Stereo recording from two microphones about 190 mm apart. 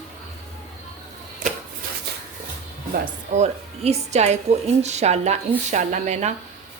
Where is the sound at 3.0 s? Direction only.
35° right (ahead or behind).